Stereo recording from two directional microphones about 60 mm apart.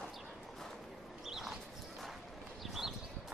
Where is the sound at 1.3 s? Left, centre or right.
Centre.